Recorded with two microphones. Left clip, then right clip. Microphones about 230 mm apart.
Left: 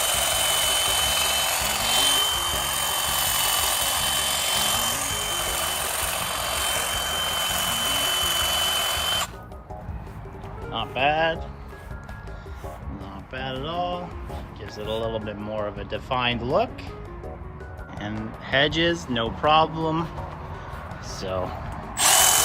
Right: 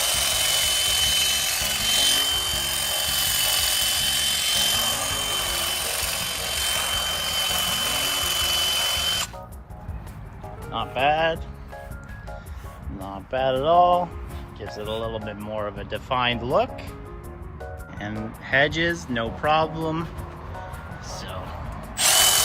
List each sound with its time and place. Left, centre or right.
0.0 s a sound: centre
4.9 s helicopter: centre
5.6 s helicopter: centre
6.7 s helicopter: centre
7.1 s vehicle: centre
8.1 s music: centre
10.7 s speech: centre
13.3 s mantra: centre
14.6 s speech: centre
18.0 s speech: centre
21.1 s music: centre
22.0 s drill: centre